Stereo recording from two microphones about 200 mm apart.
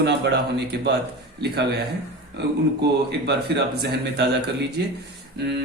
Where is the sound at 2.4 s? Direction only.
55° right (ahead or behind).